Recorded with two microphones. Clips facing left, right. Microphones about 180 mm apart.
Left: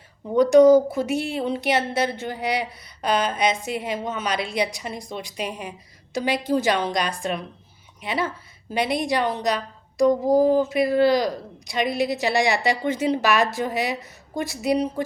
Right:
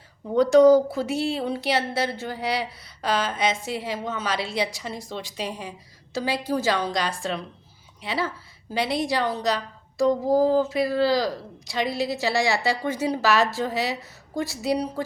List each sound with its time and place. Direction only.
0.3 s a woman's voice: 20° left (ahead or behind)